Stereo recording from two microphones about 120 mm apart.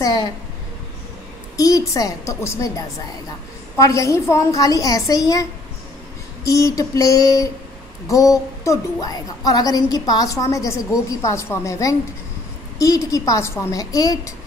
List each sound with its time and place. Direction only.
0.0 s a woman's voice: 35° left (ahead or behind)
1.6 s a woman's voice: 30° left (ahead or behind)